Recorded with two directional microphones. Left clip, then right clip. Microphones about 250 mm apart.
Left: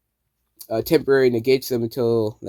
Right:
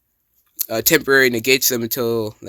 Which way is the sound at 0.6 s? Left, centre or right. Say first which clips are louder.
Right 2 dB; right.